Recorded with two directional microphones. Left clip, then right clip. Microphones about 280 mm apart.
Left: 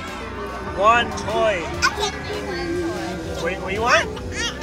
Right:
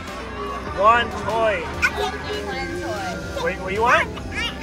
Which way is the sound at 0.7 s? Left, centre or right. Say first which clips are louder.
Even; centre.